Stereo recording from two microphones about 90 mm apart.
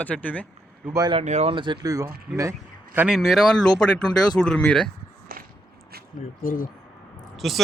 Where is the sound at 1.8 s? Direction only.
40° right (ahead or behind).